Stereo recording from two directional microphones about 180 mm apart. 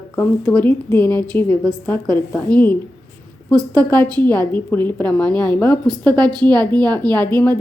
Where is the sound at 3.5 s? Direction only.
20° right (ahead or behind).